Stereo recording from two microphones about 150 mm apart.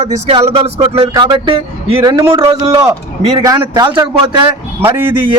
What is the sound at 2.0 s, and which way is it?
A man's voice, 25° right (ahead or behind).